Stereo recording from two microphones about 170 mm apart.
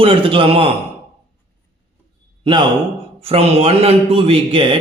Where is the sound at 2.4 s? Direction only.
25° right (ahead or behind).